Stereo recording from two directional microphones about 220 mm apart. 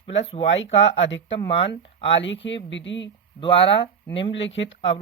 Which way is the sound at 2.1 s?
55° left (ahead or behind).